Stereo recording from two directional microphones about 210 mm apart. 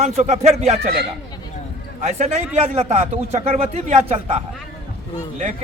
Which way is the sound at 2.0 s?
30° right (ahead or behind).